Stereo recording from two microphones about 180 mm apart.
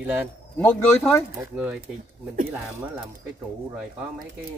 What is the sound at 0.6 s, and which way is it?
Speech, 10° left (ahead or behind).